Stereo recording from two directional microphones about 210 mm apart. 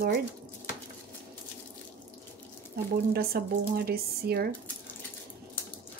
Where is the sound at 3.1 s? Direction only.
45° right (ahead or behind).